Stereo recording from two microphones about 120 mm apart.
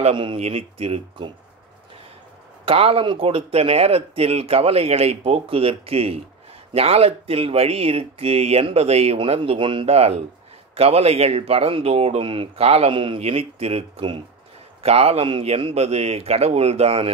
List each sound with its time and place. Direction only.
0.0 s speech: 45° right (ahead or behind)
0.4 s a man's voice: 55° right (ahead or behind)
2.6 s a man's voice: 55° right (ahead or behind)
14.8 s a man's voice: 60° right (ahead or behind)